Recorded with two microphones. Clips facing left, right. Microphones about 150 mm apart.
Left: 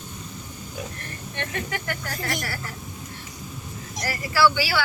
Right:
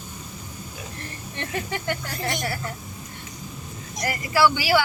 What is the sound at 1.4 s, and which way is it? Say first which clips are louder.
Speech: right 1 dB; 30° right (ahead or behind).